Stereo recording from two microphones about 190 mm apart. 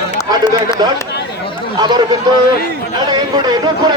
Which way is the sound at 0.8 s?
25° right (ahead or behind).